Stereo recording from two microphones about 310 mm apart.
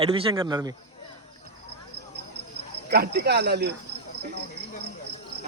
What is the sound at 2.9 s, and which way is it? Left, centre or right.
Speech, right.